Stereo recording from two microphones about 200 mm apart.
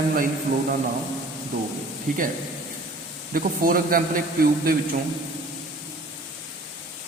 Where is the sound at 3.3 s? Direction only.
45° right (ahead or behind).